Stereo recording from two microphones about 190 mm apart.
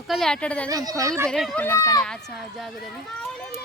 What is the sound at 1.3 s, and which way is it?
Speech, centre (ahead or behind).